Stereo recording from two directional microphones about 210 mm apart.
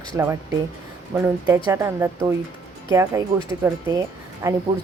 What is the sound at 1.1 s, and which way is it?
A woman's voice, 10° right (ahead or behind).